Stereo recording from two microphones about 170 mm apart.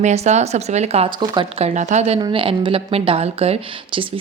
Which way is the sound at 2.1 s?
30° right (ahead or behind).